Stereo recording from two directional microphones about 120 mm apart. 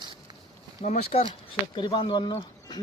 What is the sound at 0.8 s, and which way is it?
Speech, 60° left (ahead or behind).